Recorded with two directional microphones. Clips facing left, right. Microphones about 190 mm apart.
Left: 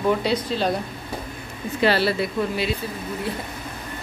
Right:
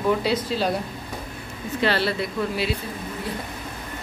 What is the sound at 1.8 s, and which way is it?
Speech, 10° left (ahead or behind).